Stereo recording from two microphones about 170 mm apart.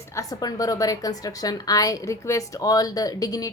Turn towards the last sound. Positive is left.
turn(degrees=20)  # may be behind; listen again after turning